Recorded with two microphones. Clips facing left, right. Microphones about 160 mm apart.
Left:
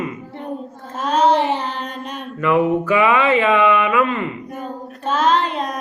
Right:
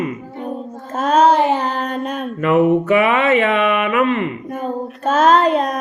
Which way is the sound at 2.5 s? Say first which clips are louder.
Right 3 dB; 25° right (ahead or behind).